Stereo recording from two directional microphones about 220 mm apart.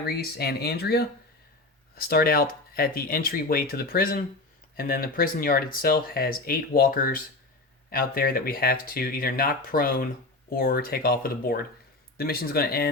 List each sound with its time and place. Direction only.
0.0 s speech: 45° left (ahead or behind)